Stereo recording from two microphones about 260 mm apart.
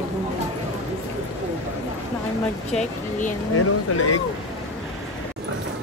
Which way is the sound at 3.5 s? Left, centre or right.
Left.